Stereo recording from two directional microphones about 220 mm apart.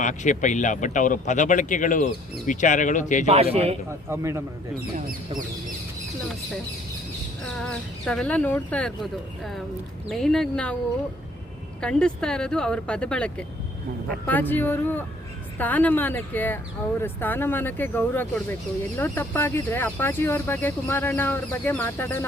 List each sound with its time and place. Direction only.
0.0 s speech: 35° left (ahead or behind)
3.2 s a man's voice: 25° right (ahead or behind)
4.1 s a man's voice: 10° right (ahead or behind)
7.6 s speech: centre (ahead or behind)
11.8 s speech: 5° left (ahead or behind)